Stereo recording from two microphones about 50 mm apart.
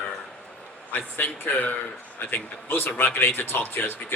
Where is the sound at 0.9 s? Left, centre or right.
Left.